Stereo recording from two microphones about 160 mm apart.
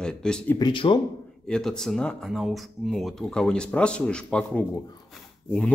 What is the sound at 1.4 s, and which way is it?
Speech, 5° left (ahead or behind).